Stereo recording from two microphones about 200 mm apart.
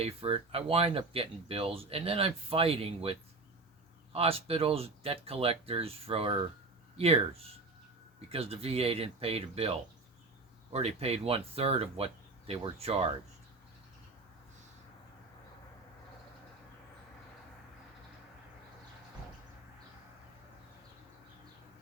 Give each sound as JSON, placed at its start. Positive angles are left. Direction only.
{"t": 0.0, "sound": "speech", "side_deg": -30}
{"t": 8.3, "sound": "speech", "side_deg": -30}